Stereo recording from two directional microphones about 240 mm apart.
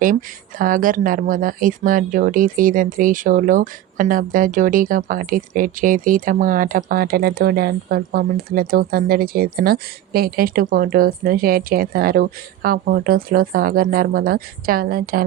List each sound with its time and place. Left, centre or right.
0.6 s speech: right